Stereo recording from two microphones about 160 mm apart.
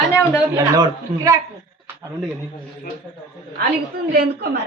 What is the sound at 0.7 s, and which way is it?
Speech, 25° right (ahead or behind).